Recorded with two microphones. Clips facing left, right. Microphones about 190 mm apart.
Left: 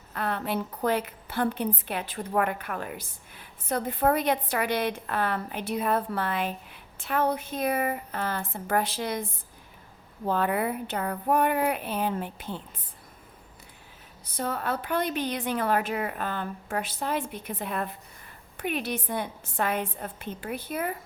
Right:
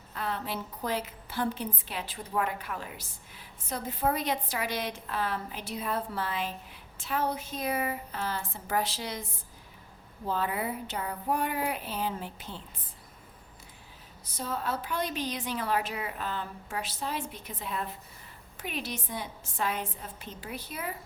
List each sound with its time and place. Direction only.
0.1 s a woman's voice: 60° left (ahead or behind)
10.2 s a woman's voice: 60° left (ahead or behind)
14.3 s a woman's voice: 60° left (ahead or behind)